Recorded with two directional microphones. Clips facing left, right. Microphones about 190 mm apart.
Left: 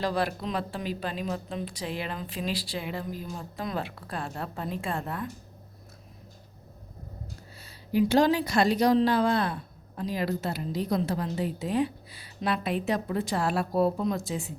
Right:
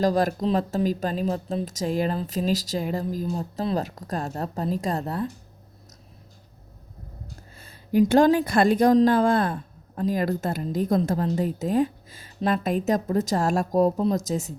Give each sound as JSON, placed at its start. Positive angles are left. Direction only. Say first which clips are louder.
{"t": 0.0, "sound": "speech", "louder": "right 7 dB", "side_deg": -40}
{"t": 7.6, "sound": "a woman's voice", "louder": "right 5 dB", "side_deg": -50}